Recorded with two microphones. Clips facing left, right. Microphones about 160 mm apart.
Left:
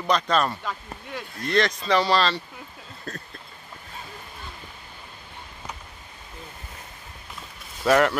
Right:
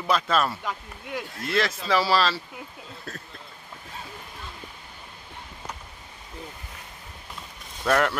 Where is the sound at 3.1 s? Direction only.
Centre (ahead or behind).